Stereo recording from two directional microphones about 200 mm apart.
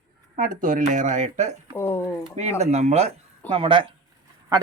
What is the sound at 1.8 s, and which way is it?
Speech, 15° left (ahead or behind).